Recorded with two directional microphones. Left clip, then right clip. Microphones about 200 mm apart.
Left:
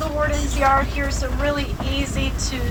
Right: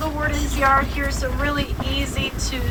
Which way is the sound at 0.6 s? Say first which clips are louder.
Even; 50° left (ahead or behind).